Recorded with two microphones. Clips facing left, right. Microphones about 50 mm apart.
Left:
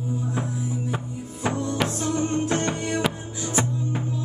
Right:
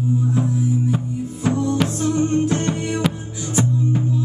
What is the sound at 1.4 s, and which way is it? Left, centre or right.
Music, centre.